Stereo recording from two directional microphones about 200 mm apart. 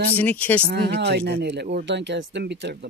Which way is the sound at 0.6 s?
55° right (ahead or behind).